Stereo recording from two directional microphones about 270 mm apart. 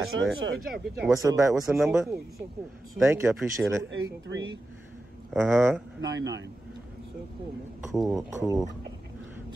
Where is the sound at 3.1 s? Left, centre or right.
Centre.